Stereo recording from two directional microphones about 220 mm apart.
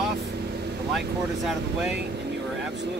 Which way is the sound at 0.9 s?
Centre (ahead or behind).